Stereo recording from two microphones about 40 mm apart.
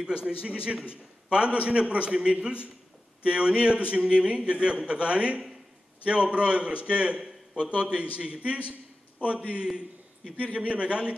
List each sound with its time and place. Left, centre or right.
0.0 s a man's voice: right
9.7 s a sound: right
10.3 s speech: right